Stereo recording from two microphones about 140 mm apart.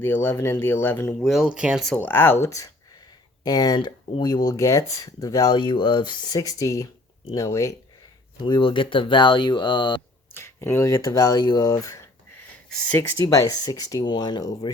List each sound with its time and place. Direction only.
0.0 s speech: 15° left (ahead or behind)
1.2 s speech: centre (ahead or behind)
1.9 s speech: 15° left (ahead or behind)
8.4 s speech: 35° left (ahead or behind)
10.3 s speech: 20° left (ahead or behind)